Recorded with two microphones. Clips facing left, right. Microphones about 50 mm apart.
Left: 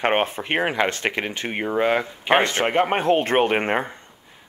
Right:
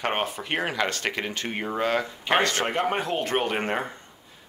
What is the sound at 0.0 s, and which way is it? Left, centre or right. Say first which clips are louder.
Speech: left 6 dB; left.